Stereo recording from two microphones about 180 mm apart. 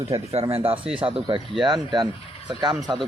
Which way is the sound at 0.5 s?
30° right (ahead or behind).